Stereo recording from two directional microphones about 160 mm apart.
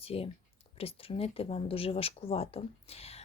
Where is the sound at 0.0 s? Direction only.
35° left (ahead or behind).